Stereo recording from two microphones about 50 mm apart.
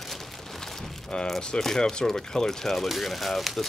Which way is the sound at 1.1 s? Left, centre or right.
Centre.